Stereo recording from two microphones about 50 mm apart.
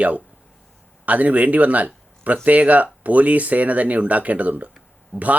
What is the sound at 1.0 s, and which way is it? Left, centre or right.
Speech, right.